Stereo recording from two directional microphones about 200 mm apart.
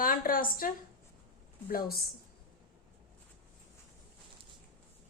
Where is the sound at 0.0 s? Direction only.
45° left (ahead or behind).